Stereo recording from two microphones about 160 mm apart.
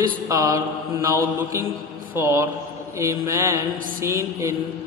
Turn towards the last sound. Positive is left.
turn(degrees=-15)  # may be behind; listen again after turning